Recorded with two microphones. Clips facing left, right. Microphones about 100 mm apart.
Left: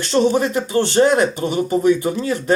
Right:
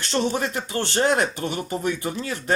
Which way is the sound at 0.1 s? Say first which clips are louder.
Left 8 dB; 15° left (ahead or behind).